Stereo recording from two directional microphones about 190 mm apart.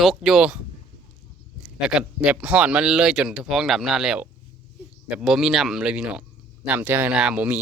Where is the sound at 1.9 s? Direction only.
5° right (ahead or behind).